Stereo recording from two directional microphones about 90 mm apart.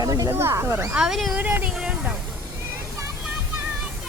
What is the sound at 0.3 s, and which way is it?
Speech, 30° right (ahead or behind).